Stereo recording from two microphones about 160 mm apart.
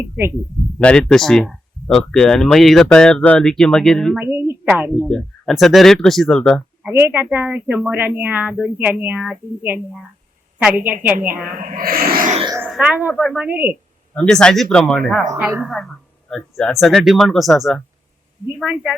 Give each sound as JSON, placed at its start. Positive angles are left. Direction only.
{"t": 0.8, "sound": "speech", "side_deg": 5}
{"t": 4.2, "sound": "speech", "side_deg": -15}
{"t": 4.7, "sound": "speech", "side_deg": 0}
{"t": 6.8, "sound": "speech", "side_deg": -15}
{"t": 11.6, "sound": "speech", "side_deg": -60}
{"t": 12.7, "sound": "speech", "side_deg": -10}
{"t": 14.3, "sound": "speech", "side_deg": 5}
{"t": 15.4, "sound": "speech", "side_deg": -15}
{"t": 15.6, "sound": "speech", "side_deg": 0}